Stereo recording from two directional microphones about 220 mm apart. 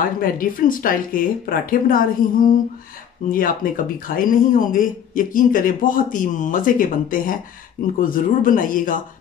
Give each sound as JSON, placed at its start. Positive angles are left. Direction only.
{"t": 0.0, "sound": "speech", "side_deg": 40}